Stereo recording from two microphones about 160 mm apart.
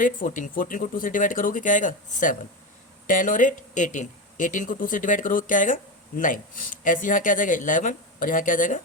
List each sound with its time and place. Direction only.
0.0 s speech: 55° left (ahead or behind)